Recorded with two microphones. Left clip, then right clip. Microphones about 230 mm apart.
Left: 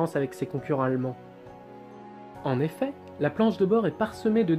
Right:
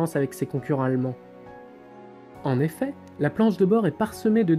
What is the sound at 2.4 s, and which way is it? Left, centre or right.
Speech, right.